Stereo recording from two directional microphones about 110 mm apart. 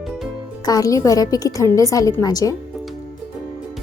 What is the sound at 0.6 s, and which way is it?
A woman's voice, 35° left (ahead or behind).